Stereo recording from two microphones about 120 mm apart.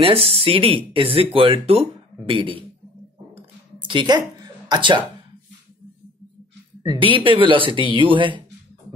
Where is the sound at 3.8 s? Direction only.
40° right (ahead or behind).